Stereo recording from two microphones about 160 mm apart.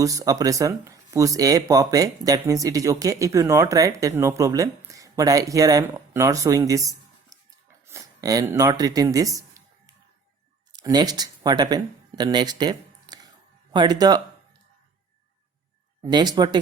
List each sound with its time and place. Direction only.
0.0 s speech: 20° right (ahead or behind)
16.0 s speech: 25° right (ahead or behind)